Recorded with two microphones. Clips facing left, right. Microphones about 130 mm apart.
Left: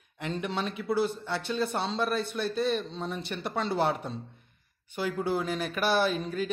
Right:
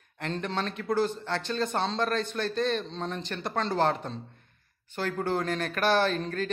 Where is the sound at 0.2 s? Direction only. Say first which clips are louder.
Even; 10° left (ahead or behind).